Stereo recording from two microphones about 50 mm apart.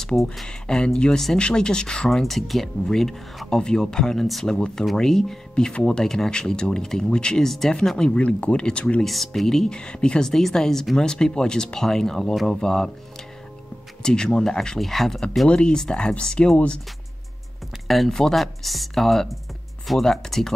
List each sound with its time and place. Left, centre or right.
0.0 s speech: centre
0.5 s speech: centre
2.2 s speech: centre
5.7 s speech: centre
7.4 s speech: centre
8.1 s speech: left
9.0 s speech: centre
14.0 s speech: centre
15.4 s speech: left
17.8 s speech: centre